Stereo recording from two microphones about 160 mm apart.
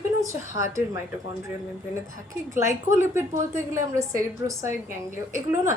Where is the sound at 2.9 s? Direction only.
15° right (ahead or behind).